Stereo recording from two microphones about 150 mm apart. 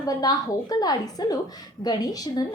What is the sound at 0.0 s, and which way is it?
A woman's voice, 25° left (ahead or behind).